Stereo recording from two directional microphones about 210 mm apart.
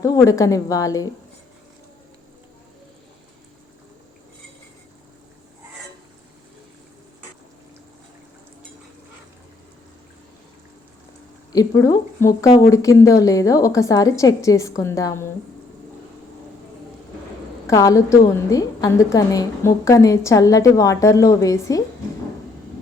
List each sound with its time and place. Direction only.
0.0 s a woman's voice: 15° left (ahead or behind)
11.5 s a woman's voice: 15° left (ahead or behind)
17.7 s a woman's voice: 15° left (ahead or behind)